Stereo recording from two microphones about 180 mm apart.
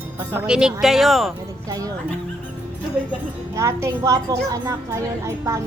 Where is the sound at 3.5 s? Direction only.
15° right (ahead or behind).